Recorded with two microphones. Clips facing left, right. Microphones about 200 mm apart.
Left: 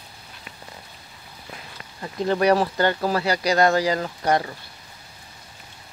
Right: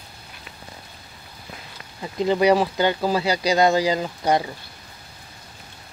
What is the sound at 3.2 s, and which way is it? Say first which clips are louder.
Speech: right 1 dB; 20° right (ahead or behind).